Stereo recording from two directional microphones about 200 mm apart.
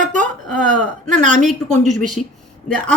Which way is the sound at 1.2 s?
35° right (ahead or behind).